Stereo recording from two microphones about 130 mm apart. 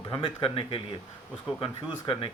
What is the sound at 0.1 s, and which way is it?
Speech, 40° left (ahead or behind).